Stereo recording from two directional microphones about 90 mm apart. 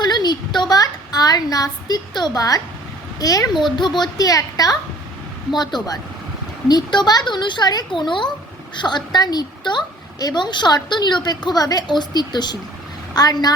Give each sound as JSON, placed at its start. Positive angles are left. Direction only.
{"t": 0.0, "sound": "a woman's voice", "side_deg": 50}
{"t": 3.6, "sound": "a woman's voice", "side_deg": 55}